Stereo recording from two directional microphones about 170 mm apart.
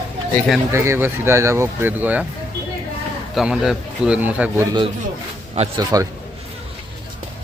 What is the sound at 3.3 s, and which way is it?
Speech, centre (ahead or behind).